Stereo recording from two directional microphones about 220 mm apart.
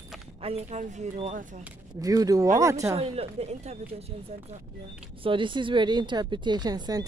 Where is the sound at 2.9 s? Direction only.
30° right (ahead or behind).